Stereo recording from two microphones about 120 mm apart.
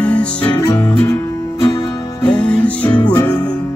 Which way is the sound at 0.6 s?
25° left (ahead or behind).